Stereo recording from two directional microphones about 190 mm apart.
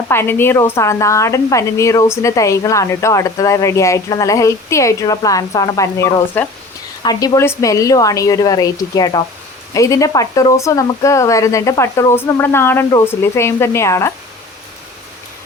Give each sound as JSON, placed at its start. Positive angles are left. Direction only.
{"t": 0.1, "sound": "speech", "side_deg": 10}